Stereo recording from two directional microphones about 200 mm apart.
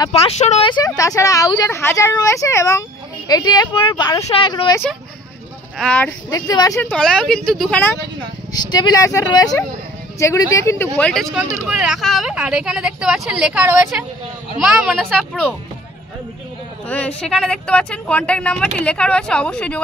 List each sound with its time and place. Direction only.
0.0 s speech: 30° left (ahead or behind)
5.8 s speech: 5° left (ahead or behind)
6.3 s speech: 15° left (ahead or behind)
8.6 s speech: 20° left (ahead or behind)
11.0 s speech: 5° left (ahead or behind)
16.8 s speech: 5° left (ahead or behind)